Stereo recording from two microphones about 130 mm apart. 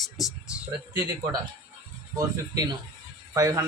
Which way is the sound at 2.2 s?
30° right (ahead or behind).